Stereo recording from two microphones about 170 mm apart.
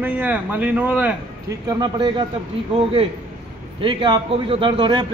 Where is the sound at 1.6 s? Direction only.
25° right (ahead or behind).